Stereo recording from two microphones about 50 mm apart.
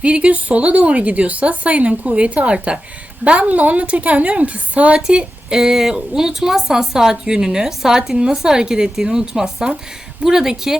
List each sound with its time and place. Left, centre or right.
0.0 s speech: right
5.0 s speech: centre